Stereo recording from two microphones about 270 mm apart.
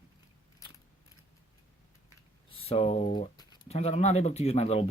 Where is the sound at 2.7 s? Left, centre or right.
Left.